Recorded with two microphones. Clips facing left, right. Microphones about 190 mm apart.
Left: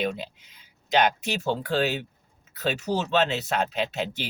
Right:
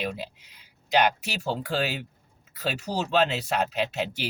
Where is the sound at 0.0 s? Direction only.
10° right (ahead or behind).